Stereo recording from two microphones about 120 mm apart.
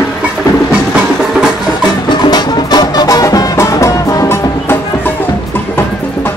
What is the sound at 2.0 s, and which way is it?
Music, 35° left (ahead or behind).